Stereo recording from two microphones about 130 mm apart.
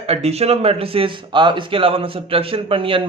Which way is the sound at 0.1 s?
55° right (ahead or behind).